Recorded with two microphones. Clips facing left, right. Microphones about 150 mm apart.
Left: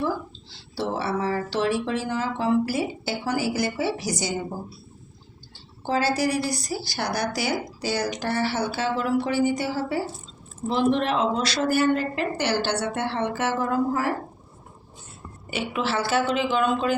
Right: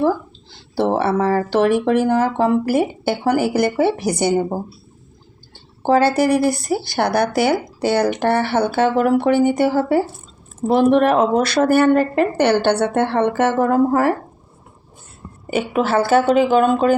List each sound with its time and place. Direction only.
0.8 s a woman's voice: 60° right (ahead or behind)
5.8 s a woman's voice: 55° right (ahead or behind)
15.4 s speech: 50° right (ahead or behind)